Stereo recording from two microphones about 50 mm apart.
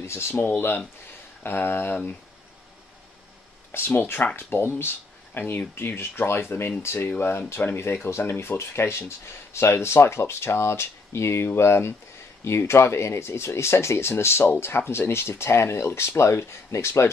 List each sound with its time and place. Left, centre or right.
0.0 s speech: left
0.6 s speech: left
3.7 s speech: left
4.4 s speech: left
4.7 s a sound: left
5.8 s speech: left